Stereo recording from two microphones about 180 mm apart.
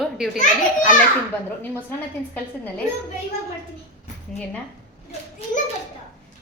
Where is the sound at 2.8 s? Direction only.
40° left (ahead or behind).